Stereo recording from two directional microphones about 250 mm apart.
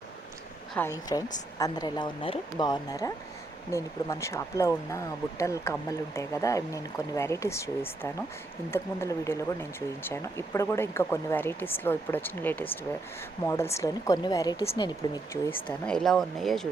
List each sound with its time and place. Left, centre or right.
0.7 s speech: centre